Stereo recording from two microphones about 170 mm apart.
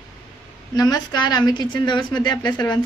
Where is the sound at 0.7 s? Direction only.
25° left (ahead or behind).